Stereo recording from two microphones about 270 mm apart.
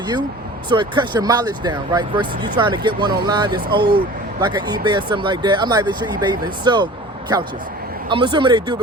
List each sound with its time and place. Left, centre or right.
0.7 s speech: centre
8.1 s speech: centre